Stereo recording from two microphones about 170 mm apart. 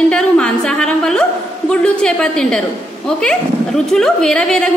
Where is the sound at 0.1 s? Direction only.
5° left (ahead or behind).